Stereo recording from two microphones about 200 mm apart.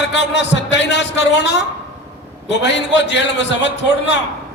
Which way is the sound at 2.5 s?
60° left (ahead or behind).